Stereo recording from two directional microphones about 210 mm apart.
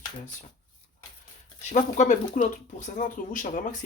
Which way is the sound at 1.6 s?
35° left (ahead or behind).